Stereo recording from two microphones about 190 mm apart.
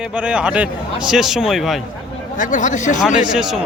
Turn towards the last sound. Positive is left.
turn(degrees=-5)  # may be behind; listen again after turning